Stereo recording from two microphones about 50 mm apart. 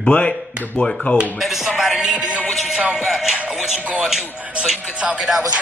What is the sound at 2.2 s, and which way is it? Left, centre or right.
Music, right.